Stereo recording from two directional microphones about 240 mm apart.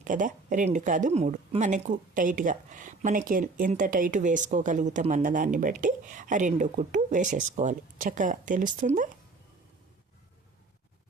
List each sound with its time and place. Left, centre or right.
0.0 s speech: right